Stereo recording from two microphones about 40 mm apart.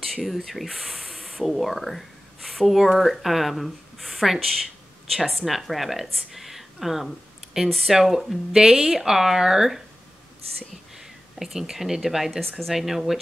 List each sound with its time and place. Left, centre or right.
0.0 s spray: centre
2.6 s a woman's voice: centre
11.0 s a sound: centre
11.7 s speech: centre
12.7 s speech: centre